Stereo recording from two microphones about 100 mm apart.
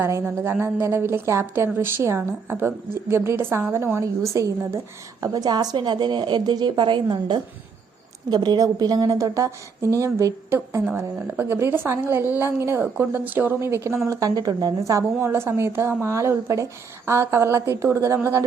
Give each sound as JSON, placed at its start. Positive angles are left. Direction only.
{"t": 0.0, "sound": "a woman's voice", "side_deg": -25}